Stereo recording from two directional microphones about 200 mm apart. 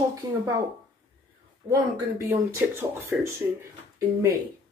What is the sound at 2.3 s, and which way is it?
Speech, 10° right (ahead or behind).